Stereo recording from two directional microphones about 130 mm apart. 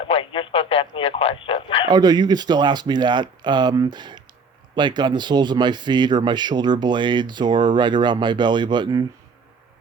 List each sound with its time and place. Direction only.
0.0 s speech: 40° left (ahead or behind)
1.9 s speech: 30° right (ahead or behind)